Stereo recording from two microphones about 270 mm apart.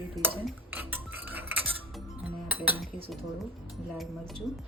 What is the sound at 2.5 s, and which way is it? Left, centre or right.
Speech, centre.